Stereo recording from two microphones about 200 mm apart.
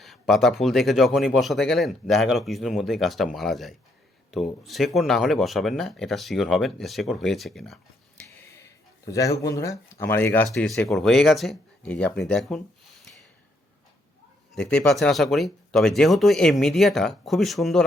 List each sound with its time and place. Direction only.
0.0 s speech: centre (ahead or behind)
9.0 s speech: 15° left (ahead or behind)
14.5 s speech: 5° left (ahead or behind)